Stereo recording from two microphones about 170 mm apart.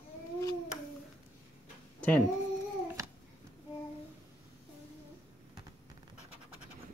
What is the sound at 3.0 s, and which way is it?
Babbling, 20° right (ahead or behind).